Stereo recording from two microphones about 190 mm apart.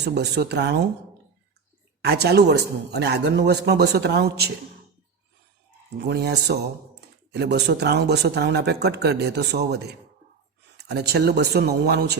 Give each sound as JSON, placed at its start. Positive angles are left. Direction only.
{"t": 0.0, "sound": "speech", "side_deg": -60}
{"t": 2.0, "sound": "speech", "side_deg": -60}
{"t": 6.0, "sound": "speech", "side_deg": -60}